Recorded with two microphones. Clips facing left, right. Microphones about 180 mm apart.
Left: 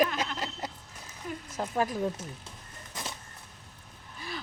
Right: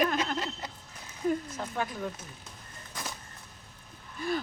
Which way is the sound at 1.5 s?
40° left (ahead or behind).